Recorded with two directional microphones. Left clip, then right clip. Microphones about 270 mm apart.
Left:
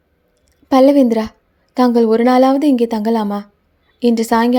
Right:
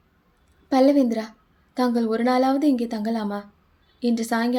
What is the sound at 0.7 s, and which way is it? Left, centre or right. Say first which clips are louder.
A woman's voice: left 8 dB; left.